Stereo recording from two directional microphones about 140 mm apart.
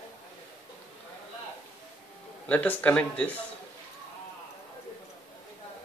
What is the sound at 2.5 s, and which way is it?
Speech, 10° left (ahead or behind).